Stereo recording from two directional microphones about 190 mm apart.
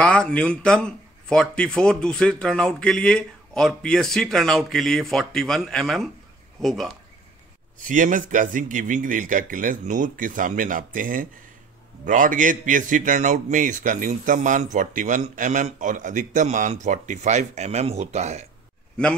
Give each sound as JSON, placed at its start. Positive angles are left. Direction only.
{"t": 0.0, "sound": "speech", "side_deg": 5}
{"t": 7.8, "sound": "a man's voice", "side_deg": -45}